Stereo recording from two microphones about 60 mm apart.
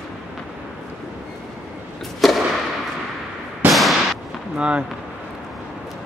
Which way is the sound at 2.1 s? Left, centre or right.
Centre.